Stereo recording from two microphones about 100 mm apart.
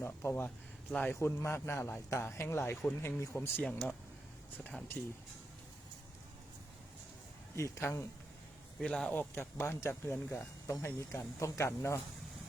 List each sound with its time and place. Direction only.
0.0 s speech: 25° left (ahead or behind)
0.9 s speech: 15° left (ahead or behind)
1.2 s speech: 25° left (ahead or behind)
3.6 s speech: 10° left (ahead or behind)
7.5 s speech: 30° left (ahead or behind)
8.8 s a man's voice: 5° left (ahead or behind)
9.1 s speech: 25° left (ahead or behind)